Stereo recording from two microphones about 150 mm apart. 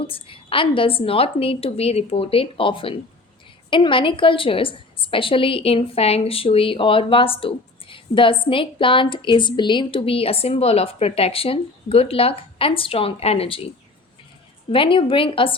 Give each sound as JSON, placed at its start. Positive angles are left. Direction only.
{"t": 0.0, "sound": "a woman's voice", "side_deg": 35}
{"t": 14.7, "sound": "a woman's voice", "side_deg": 35}